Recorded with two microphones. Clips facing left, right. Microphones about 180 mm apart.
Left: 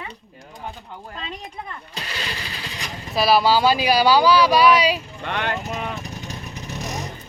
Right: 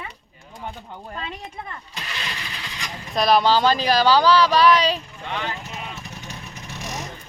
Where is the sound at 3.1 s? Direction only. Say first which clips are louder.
Even; 5° left (ahead or behind).